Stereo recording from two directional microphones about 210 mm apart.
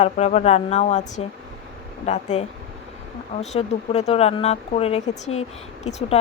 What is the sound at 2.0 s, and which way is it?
Speech, 30° left (ahead or behind).